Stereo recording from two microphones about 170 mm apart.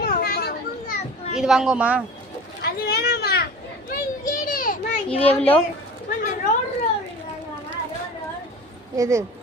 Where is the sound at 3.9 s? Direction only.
55° left (ahead or behind).